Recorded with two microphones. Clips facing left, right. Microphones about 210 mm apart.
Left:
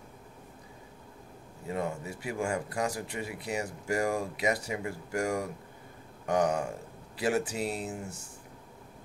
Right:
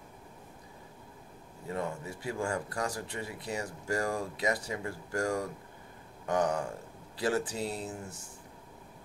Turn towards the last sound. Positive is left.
turn(degrees=10)  # may be behind; listen again after turning